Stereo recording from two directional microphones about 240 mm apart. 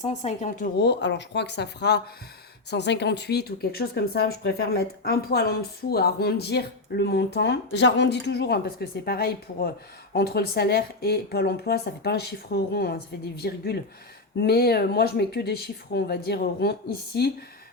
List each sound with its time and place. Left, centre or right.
0.0 s speech: left